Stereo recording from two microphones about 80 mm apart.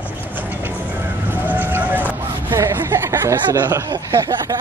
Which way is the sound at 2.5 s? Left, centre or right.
Right.